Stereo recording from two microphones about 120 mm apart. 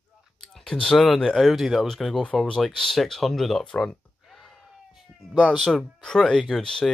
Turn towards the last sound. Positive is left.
turn(degrees=5)  # may be behind; listen again after turning